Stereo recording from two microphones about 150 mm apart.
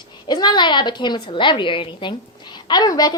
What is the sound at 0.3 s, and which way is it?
A woman's voice, 30° left (ahead or behind).